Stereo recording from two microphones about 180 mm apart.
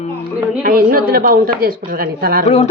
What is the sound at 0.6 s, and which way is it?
Speech, 55° right (ahead or behind).